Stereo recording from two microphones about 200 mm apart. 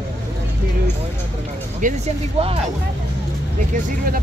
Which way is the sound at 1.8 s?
35° right (ahead or behind).